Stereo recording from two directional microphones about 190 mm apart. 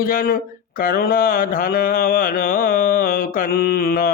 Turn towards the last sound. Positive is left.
turn(degrees=50)  # may be behind; listen again after turning